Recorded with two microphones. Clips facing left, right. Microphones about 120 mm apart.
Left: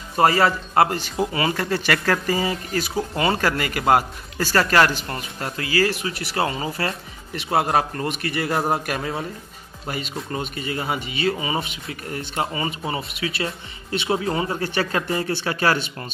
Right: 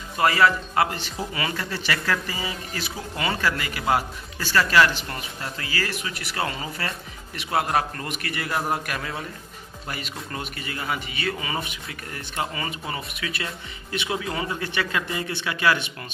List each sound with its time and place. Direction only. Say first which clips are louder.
0.2 s speech: left 2 dB; 35° left (ahead or behind)
5.8 s speech: left 9 dB; 30° left (ahead or behind)